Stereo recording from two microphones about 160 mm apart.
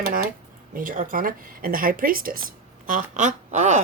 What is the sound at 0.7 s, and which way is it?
Speech, 60° right (ahead or behind).